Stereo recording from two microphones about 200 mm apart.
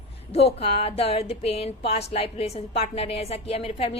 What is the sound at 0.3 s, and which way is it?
A woman's voice, 30° left (ahead or behind).